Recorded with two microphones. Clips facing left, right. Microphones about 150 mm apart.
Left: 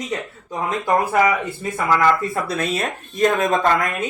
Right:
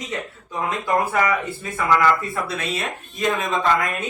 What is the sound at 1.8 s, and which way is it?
Speech, centre (ahead or behind).